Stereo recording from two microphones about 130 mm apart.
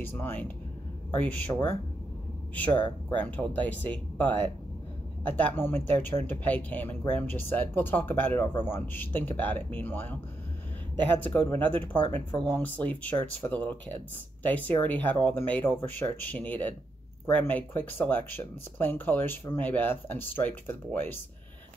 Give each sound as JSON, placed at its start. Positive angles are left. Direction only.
{"t": 0.0, "sound": "speech", "side_deg": 15}
{"t": 2.5, "sound": "speech", "side_deg": 10}
{"t": 12.4, "sound": "speech", "side_deg": -35}
{"t": 12.6, "sound": "speech", "side_deg": 10}